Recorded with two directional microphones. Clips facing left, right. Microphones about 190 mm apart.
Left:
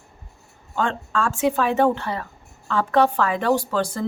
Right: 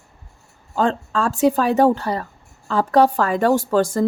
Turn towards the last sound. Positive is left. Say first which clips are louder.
# right 6 dB
turn(degrees=-45)  # may be behind; listen again after turning